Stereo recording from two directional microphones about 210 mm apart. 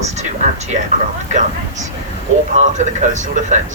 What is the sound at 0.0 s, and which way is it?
Speech, 35° right (ahead or behind).